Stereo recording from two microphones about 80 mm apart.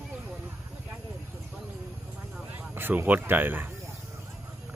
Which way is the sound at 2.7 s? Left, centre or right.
Right.